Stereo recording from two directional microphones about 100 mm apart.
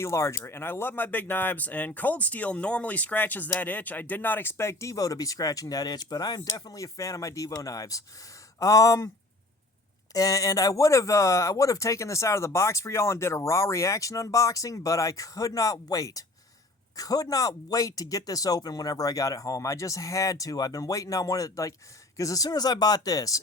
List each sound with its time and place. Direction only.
0.0 s speech: 30° left (ahead or behind)
10.2 s speech: 35° left (ahead or behind)